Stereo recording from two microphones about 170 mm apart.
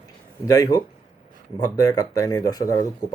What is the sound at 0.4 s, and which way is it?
Speech, 20° left (ahead or behind).